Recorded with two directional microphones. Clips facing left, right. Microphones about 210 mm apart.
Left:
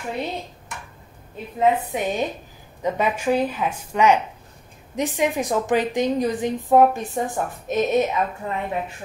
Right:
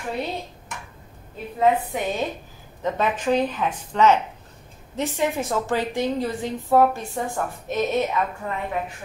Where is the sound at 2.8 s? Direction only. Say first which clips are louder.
Left 1 dB; 10° left (ahead or behind).